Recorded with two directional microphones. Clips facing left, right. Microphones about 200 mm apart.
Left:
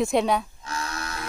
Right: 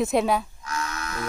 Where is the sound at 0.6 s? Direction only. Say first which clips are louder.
Right 1 dB; 30° left (ahead or behind).